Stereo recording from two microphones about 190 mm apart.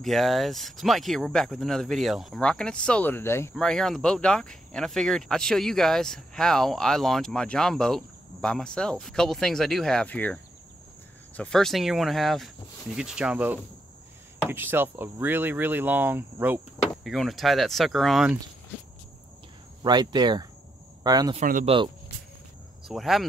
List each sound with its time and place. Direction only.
0.0 s speech: centre (ahead or behind)
3.5 s speech: centre (ahead or behind)
19.8 s speech: 20° right (ahead or behind)
21.4 s speech: 45° right (ahead or behind)
21.6 s speech: 25° right (ahead or behind)
22.8 s speech: centre (ahead or behind)